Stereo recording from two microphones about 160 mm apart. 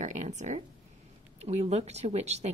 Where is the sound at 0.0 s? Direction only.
45° right (ahead or behind).